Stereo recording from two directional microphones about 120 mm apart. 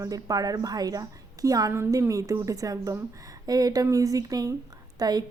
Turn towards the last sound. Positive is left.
turn(degrees=-35)  # may be behind; listen again after turning